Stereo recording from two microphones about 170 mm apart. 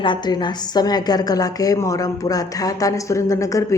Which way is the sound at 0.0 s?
25° left (ahead or behind).